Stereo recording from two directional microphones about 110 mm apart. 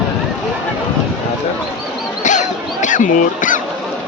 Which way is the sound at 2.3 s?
90° left.